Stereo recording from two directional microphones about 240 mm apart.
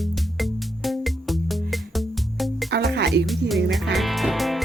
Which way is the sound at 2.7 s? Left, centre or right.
Right.